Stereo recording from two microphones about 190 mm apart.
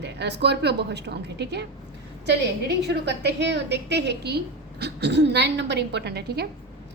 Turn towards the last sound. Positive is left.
turn(degrees=-60)  # may be behind; listen again after turning